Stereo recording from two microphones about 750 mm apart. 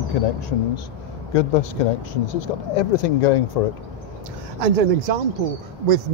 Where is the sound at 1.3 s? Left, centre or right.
Left.